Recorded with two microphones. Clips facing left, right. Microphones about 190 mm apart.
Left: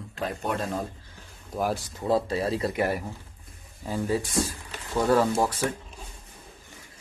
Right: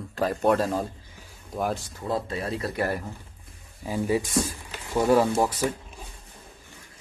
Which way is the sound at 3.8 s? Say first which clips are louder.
Right 2 dB; 15° right (ahead or behind).